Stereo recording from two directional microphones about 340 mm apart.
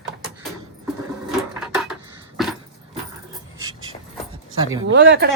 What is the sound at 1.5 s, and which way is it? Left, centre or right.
Cutlery, centre.